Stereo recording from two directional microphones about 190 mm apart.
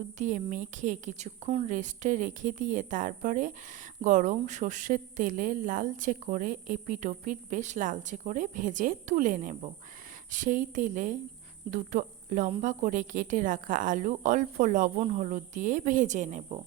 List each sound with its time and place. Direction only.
0.2 s a woman's voice: 40° right (ahead or behind)